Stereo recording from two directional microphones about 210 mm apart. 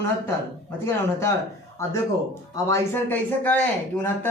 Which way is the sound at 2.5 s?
15° left (ahead or behind).